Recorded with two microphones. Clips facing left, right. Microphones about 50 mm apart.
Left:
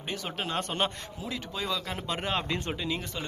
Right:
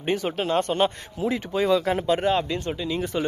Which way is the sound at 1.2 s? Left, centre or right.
Right.